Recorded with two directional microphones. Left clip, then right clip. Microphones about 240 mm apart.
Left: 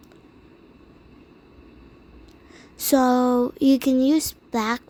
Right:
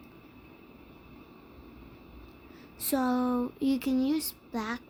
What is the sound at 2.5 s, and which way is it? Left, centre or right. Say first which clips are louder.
Speech: left 11 dB; left.